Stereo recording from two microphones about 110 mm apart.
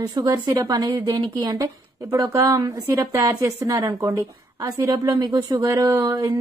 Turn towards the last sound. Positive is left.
turn(degrees=-35)  # may be behind; listen again after turning